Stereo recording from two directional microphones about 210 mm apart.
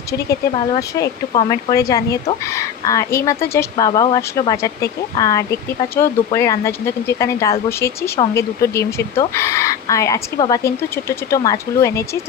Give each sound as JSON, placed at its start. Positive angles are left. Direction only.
{"t": 0.1, "sound": "speech", "side_deg": 15}